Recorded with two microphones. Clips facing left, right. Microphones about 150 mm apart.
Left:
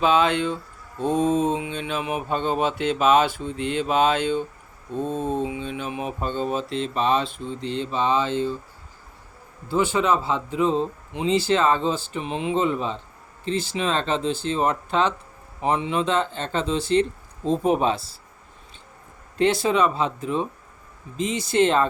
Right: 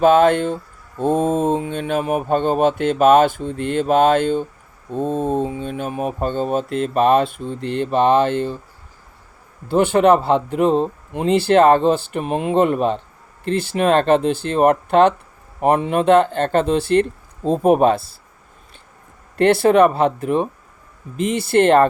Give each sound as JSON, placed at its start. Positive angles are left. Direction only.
{"t": 0.0, "sound": "speech", "side_deg": -50}
{"t": 9.6, "sound": "speech", "side_deg": -60}
{"t": 19.4, "sound": "speech", "side_deg": -60}